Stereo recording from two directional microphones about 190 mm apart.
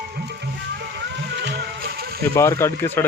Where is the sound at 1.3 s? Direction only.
70° right (ahead or behind).